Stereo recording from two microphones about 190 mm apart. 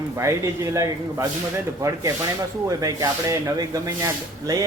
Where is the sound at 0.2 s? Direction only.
15° right (ahead or behind).